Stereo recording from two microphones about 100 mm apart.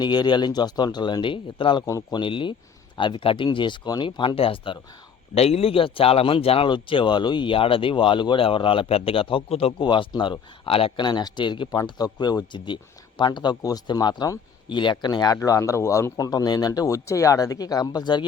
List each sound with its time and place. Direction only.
0.0 s speech: 50° left (ahead or behind)
1.9 s speech: 40° left (ahead or behind); by 4.8 s 60° left (ahead or behind)
5.3 s speech: 90° left
9.7 s speech: 55° left (ahead or behind); by 11.0 s 70° left (ahead or behind)
11.0 s speech: 45° left (ahead or behind)
11.8 s speech: 40° left (ahead or behind)
15.4 s speech: 30° left (ahead or behind)
16.1 s speech: 40° left (ahead or behind)